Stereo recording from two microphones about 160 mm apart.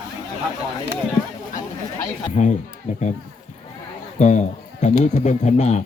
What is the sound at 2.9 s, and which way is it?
Speech, 45° left (ahead or behind).